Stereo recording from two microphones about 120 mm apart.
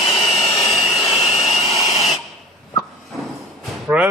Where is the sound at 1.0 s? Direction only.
55° left (ahead or behind).